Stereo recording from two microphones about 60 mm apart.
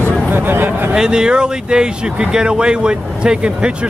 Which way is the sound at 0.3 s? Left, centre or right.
Right.